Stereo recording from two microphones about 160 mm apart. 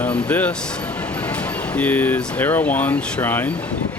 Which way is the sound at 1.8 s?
10° left (ahead or behind).